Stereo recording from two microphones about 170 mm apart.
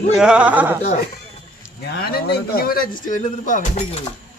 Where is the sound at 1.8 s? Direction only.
70° left (ahead or behind); by 4.0 s 45° left (ahead or behind).